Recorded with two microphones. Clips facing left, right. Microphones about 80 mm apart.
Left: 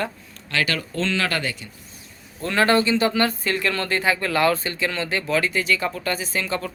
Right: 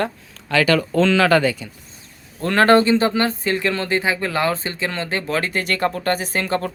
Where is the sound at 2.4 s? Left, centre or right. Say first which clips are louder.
Right 5 dB; right.